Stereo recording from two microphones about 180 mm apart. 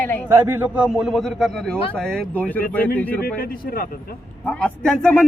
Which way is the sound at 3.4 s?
55° left (ahead or behind).